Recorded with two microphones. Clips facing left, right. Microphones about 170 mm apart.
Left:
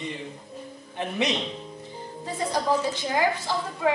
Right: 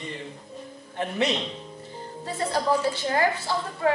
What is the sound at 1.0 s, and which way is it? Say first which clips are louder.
A woman's voice: right 1 dB; 15° left (ahead or behind).